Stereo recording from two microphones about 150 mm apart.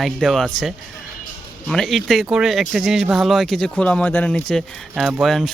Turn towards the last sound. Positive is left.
turn(degrees=0)  # may be behind; listen again after turning